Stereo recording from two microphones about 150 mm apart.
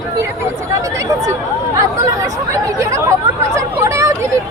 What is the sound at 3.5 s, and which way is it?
Hubbub, 20° right (ahead or behind).